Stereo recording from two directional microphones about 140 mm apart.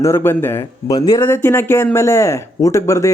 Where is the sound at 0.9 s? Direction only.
30° left (ahead or behind).